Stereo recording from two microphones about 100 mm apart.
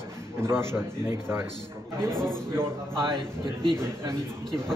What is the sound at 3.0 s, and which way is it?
Speech, 60° right (ahead or behind).